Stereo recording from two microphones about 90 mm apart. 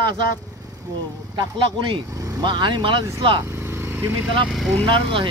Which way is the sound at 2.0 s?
35° right (ahead or behind).